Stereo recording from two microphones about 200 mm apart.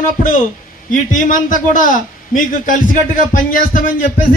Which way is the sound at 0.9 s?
40° left (ahead or behind).